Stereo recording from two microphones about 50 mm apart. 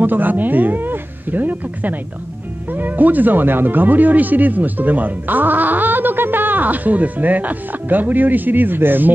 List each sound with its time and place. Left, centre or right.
0.0 s speech: right